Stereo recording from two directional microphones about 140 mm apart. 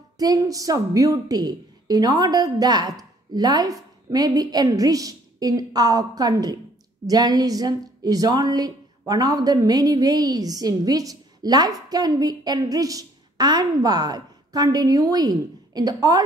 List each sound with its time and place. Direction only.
0.2 s a woman's voice: 25° right (ahead or behind)